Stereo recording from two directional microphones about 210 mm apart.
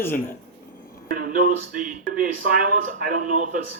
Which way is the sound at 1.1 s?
40° right (ahead or behind).